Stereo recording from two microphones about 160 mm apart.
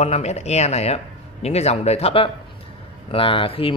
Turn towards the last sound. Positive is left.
turn(degrees=35)  # may be behind; listen again after turning